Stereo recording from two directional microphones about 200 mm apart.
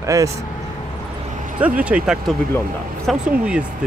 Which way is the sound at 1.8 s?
5° right (ahead or behind).